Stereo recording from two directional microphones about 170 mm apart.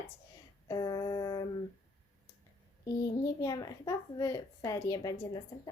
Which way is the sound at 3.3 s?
20° left (ahead or behind).